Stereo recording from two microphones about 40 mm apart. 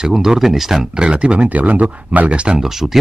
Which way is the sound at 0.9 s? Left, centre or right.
Right.